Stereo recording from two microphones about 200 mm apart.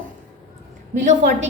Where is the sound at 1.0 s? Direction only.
35° right (ahead or behind).